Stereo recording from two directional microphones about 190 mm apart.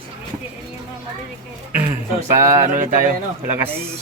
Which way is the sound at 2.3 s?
15° right (ahead or behind).